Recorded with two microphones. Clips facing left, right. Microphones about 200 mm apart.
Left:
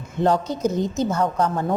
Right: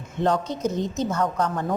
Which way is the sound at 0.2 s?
35° left (ahead or behind).